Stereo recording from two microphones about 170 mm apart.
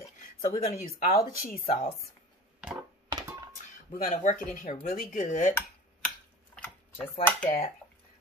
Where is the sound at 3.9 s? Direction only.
55° left (ahead or behind).